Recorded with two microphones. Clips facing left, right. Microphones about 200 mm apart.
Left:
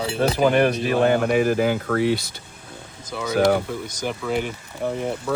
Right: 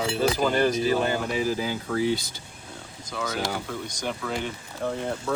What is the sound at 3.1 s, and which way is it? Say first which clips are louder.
Speech: left 4 dB; 10° left (ahead or behind).